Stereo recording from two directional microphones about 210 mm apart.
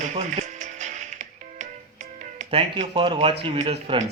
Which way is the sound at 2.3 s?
25° right (ahead or behind).